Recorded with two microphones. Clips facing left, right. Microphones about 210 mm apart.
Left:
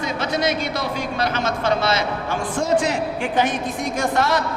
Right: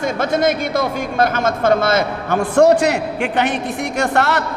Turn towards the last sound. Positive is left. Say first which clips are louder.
# right 3 dB
turn(degrees=-70)  # may be behind; listen again after turning